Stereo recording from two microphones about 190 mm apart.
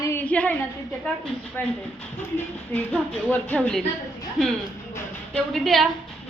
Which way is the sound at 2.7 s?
10° left (ahead or behind).